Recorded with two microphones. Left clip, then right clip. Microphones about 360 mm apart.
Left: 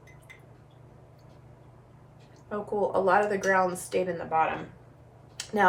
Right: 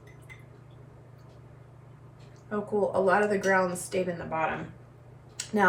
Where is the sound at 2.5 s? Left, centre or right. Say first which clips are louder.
Even; centre.